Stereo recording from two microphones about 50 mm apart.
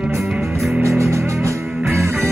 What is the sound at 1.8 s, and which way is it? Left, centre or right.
Music, right.